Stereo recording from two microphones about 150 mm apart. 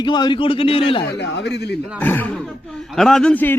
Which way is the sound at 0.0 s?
30° left (ahead or behind).